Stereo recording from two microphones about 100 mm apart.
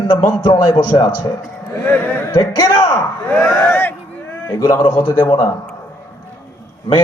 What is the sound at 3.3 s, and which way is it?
Speech, 10° left (ahead or behind).